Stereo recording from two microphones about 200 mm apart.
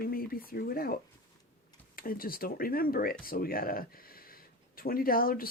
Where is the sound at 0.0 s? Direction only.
50° left (ahead or behind).